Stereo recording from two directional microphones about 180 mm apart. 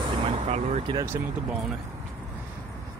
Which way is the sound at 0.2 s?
35° right (ahead or behind).